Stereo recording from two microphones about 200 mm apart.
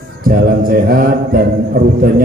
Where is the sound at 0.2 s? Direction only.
45° right (ahead or behind).